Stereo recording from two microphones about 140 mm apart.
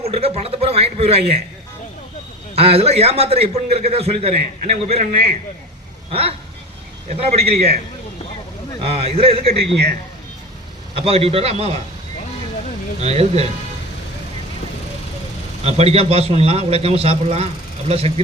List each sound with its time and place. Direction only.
0.0 s a sound: 45° right (ahead or behind)
2.6 s a man's voice: 45° right (ahead or behind)
8.8 s a man's voice: 45° right (ahead or behind)
10.9 s a man's voice: 45° right (ahead or behind)
13.0 s a man's voice: 50° right (ahead or behind)
15.6 s a man's voice: 45° right (ahead or behind)